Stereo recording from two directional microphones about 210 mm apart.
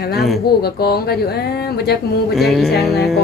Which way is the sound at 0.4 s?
45° left (ahead or behind).